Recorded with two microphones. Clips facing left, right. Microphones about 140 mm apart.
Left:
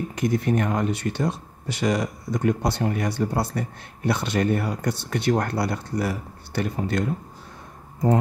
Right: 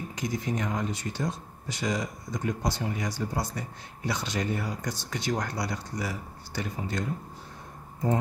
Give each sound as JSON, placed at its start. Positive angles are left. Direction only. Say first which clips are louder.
{"t": 0.1, "sound": "speech", "louder": "left 8 dB", "side_deg": 60}